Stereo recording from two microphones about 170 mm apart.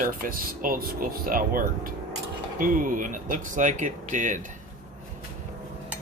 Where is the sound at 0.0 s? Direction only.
55° right (ahead or behind).